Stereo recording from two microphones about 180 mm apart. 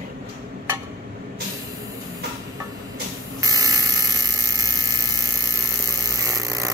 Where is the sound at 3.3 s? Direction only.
20° right (ahead or behind).